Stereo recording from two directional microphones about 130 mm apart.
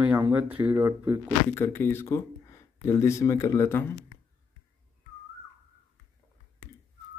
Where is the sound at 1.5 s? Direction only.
20° left (ahead or behind).